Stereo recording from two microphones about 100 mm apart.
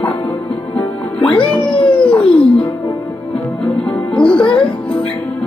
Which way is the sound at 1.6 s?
65° left (ahead or behind).